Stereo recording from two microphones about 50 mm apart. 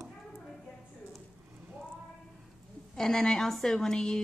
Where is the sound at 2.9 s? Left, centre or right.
Centre.